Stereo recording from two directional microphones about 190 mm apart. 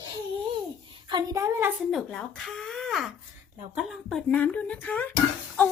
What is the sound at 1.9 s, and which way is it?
Speech, centre (ahead or behind).